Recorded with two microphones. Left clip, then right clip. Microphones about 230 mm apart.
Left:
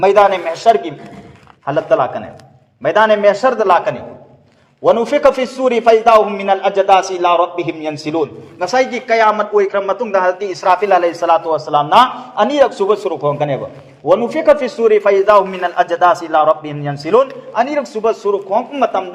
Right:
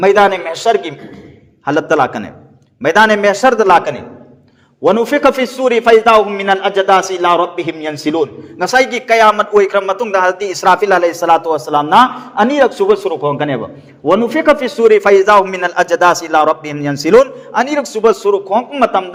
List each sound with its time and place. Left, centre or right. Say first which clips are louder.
0.0 s a man's voice: right 1 dB; right